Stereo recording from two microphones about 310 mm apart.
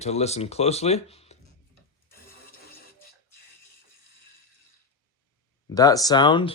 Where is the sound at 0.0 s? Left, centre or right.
Left.